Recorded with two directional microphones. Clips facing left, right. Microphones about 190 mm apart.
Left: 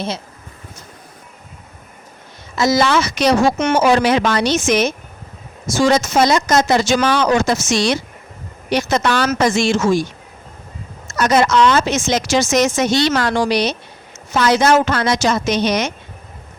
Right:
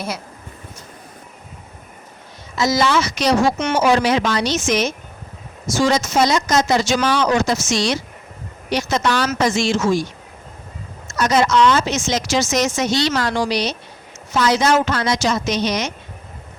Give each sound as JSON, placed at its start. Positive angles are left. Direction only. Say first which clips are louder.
{"t": 2.6, "sound": "speech", "louder": "left 2 dB", "side_deg": 55}
{"t": 11.1, "sound": "speech", "louder": "left 2 dB", "side_deg": 55}